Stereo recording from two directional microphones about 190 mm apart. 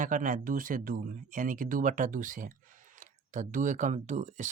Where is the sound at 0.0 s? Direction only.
45° right (ahead or behind).